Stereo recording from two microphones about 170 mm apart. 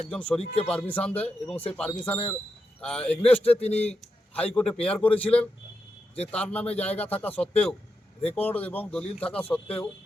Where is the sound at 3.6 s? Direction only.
35° left (ahead or behind).